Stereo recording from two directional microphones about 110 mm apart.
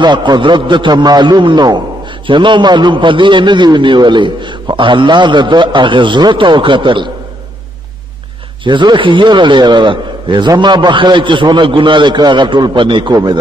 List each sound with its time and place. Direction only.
0.0 s a man's voice: 45° right (ahead or behind)
8.6 s a man's voice: 45° right (ahead or behind)